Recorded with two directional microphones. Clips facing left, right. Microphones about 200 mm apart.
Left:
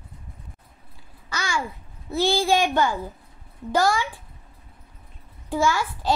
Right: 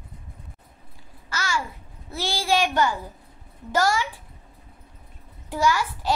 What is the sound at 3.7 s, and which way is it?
Speech, 15° left (ahead or behind).